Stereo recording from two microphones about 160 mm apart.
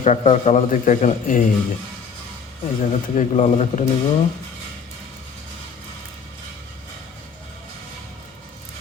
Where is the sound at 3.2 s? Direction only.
45° left (ahead or behind).